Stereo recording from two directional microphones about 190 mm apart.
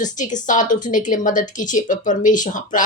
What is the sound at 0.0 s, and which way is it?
A woman's voice, 40° left (ahead or behind).